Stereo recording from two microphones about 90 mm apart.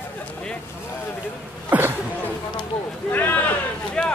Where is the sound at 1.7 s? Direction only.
25° right (ahead or behind).